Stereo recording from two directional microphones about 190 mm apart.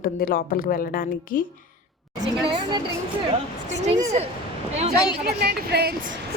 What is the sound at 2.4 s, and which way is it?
Speech, 25° right (ahead or behind).